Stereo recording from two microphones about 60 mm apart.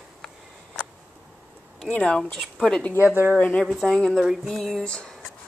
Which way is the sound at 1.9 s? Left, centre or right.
Centre.